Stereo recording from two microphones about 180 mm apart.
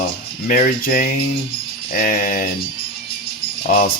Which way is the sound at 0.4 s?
50° left (ahead or behind).